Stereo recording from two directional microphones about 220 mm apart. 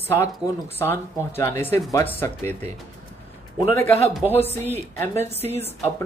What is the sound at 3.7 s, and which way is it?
Speech, 10° left (ahead or behind).